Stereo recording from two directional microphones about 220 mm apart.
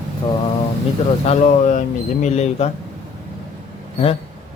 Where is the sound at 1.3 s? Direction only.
30° left (ahead or behind).